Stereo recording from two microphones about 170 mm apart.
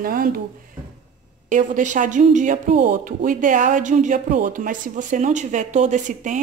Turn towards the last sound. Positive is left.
turn(degrees=-45)  # may be behind; listen again after turning